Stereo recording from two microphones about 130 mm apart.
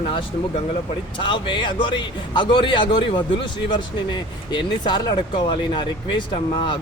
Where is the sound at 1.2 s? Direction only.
40° left (ahead or behind).